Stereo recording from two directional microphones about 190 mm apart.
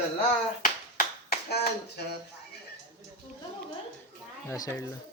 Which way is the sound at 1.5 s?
55° left (ahead or behind).